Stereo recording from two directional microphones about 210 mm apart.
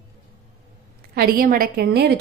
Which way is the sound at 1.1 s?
45° right (ahead or behind).